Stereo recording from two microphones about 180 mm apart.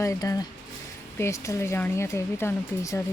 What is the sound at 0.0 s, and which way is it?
Speech, 20° left (ahead or behind).